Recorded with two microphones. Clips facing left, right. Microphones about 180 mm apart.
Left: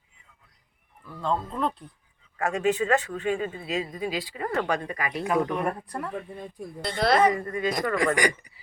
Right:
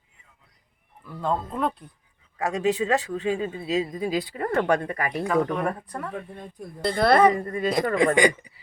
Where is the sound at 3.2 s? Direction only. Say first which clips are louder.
Right 1 dB; 30° right (ahead or behind).